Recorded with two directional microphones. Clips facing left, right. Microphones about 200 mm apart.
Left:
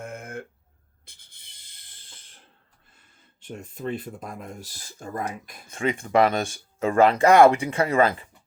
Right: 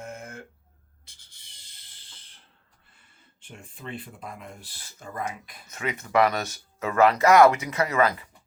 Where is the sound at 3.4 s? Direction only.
40° left (ahead or behind).